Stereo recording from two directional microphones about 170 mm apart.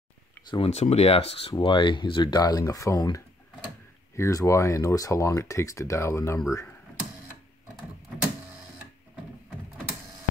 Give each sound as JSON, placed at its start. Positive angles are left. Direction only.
{"t": 0.5, "sound": "speech", "side_deg": 35}